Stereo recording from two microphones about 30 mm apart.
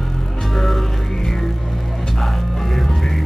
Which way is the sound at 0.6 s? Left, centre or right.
Centre.